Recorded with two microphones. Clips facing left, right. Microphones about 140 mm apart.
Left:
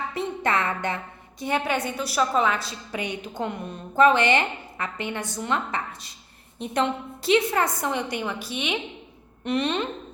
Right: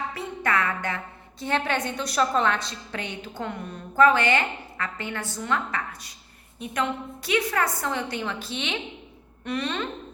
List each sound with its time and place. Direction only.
0.1 s a woman's voice: 25° left (ahead or behind)